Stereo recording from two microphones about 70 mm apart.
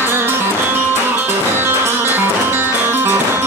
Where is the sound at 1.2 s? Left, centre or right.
Right.